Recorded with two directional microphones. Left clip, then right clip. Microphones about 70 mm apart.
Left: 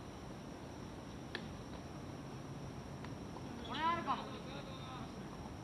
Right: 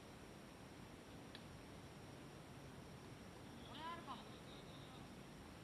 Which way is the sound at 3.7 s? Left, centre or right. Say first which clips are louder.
Left 15 dB; right.